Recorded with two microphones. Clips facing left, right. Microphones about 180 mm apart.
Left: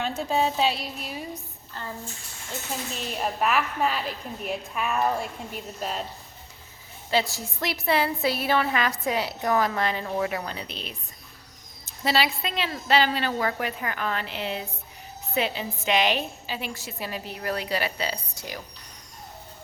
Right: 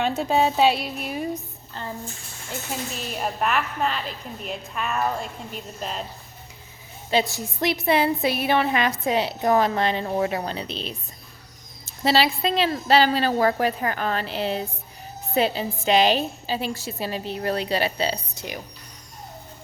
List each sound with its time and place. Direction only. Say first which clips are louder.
0.0 s speech: right 4 dB; 65° right (ahead or behind)
2.9 s a woman's voice: left 2 dB; centre (ahead or behind)
7.1 s a woman's voice: right 3 dB; 20° right (ahead or behind)
12.0 s a woman's voice: right 5 dB; 30° right (ahead or behind)